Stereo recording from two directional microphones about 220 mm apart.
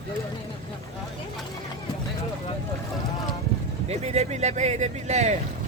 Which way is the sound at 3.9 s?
30° right (ahead or behind).